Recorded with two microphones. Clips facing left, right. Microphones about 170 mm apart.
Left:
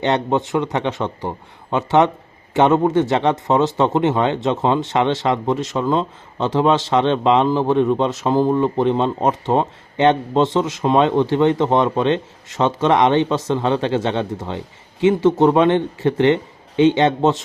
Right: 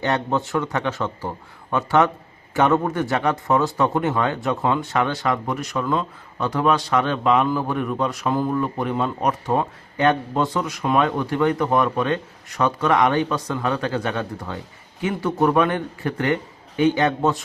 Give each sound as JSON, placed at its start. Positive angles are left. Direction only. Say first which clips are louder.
{"t": 0.0, "sound": "speech", "louder": "left 4 dB", "side_deg": 20}